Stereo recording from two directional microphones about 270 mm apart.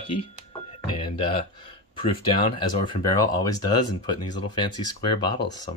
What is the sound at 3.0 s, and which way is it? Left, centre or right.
Speech, centre.